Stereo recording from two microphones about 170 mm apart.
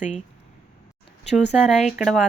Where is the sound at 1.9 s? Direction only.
Centre (ahead or behind).